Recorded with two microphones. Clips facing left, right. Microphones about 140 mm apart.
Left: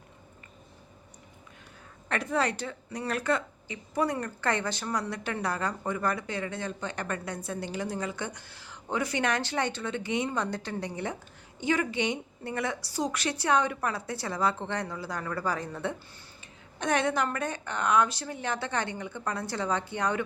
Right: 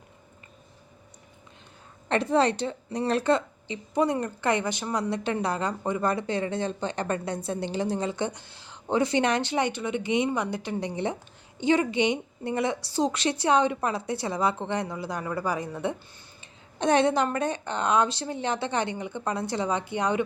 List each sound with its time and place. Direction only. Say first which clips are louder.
2.0 s a woman's voice: right 6 dB; 25° right (ahead or behind)
16.7 s a woman's voice: right 5 dB; 25° right (ahead or behind)